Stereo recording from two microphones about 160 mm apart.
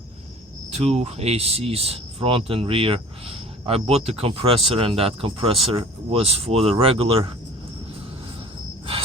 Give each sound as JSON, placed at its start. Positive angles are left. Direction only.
{"t": 0.8, "sound": "speech", "side_deg": -40}